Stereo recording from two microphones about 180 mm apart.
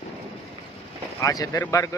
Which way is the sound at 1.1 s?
20° left (ahead or behind).